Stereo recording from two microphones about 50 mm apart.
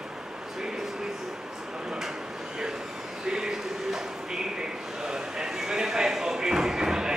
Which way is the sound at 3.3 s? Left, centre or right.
Centre.